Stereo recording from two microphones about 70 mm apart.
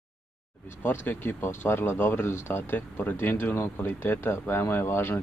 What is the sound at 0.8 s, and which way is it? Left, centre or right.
Speech, left.